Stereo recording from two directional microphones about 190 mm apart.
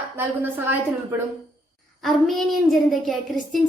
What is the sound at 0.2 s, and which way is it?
Speech, 10° right (ahead or behind).